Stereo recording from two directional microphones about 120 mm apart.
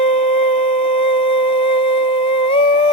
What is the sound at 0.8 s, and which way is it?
Humming, 50° left (ahead or behind).